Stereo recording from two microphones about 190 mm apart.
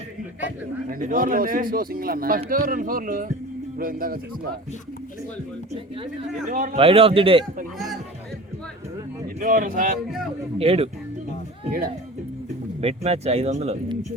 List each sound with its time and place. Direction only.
0.9 s speech: 50° right (ahead or behind)
6.5 s speech: 45° right (ahead or behind)
6.7 s a man's voice: 30° right (ahead or behind)
9.4 s speech: 45° right (ahead or behind)
10.6 s speech: 30° right (ahead or behind)
12.8 s speech: 30° right (ahead or behind)